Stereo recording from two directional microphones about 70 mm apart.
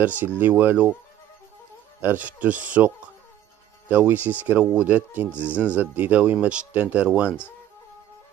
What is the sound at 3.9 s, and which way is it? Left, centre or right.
A man's voice, right.